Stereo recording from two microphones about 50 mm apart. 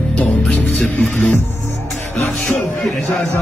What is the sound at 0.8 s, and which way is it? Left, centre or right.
Music, left.